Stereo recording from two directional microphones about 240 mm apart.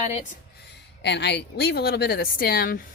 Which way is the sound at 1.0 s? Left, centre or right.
Left.